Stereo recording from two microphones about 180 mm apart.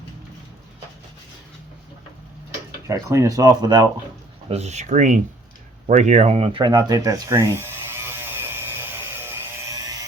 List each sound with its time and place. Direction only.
2.8 s speech: 15° right (ahead or behind)
4.4 s speech: 35° right (ahead or behind)
5.9 s a sound: 40° right (ahead or behind); by 10.1 s 20° right (ahead or behind)